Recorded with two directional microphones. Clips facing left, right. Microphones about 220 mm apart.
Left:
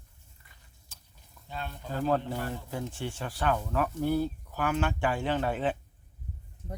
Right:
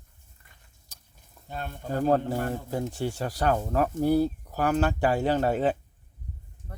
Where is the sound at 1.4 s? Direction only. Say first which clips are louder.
Right 4 dB; 50° right (ahead or behind).